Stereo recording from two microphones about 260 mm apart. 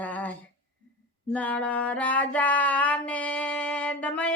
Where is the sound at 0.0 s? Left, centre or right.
Centre.